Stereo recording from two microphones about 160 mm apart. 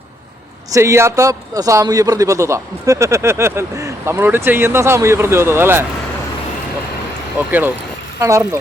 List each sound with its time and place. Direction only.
0.7 s a man's voice: 20° right (ahead or behind)
7.3 s a man's voice: 10° right (ahead or behind)